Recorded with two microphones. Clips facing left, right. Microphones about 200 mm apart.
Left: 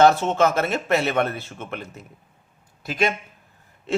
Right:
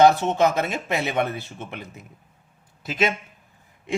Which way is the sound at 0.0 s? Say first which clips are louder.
Even; 15° right (ahead or behind).